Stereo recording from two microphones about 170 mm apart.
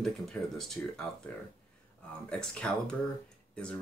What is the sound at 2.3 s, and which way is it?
Speech, 5° left (ahead or behind).